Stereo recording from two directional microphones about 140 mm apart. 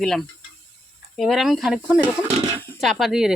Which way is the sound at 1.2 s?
Centre (ahead or behind).